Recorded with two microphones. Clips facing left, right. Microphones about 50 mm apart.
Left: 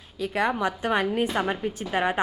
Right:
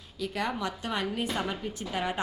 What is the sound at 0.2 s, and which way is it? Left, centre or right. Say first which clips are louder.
A woman's voice: left 7 dB; left.